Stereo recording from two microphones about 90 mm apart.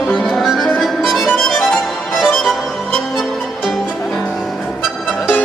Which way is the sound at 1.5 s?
5° left (ahead or behind).